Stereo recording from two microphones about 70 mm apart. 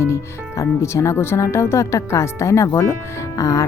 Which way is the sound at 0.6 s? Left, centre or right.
Left.